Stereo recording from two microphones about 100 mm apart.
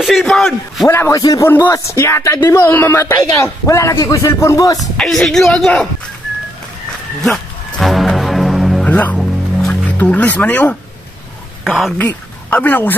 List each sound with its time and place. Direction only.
0.0 s a woman's voice: centre (ahead or behind)
0.8 s a man's voice: 30° left (ahead or behind)
4.7 s a woman's voice: 5° left (ahead or behind)
7.8 s music: centre (ahead or behind)
8.8 s speech: 15° left (ahead or behind)
9.2 s music: 5° left (ahead or behind)
9.9 s speech: 15° left (ahead or behind)
11.6 s speech: centre (ahead or behind)
12.0 s speech: 15° left (ahead or behind)